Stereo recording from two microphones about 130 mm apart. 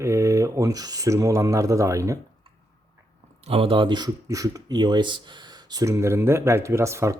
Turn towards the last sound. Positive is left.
turn(degrees=-20)  # may be behind; listen again after turning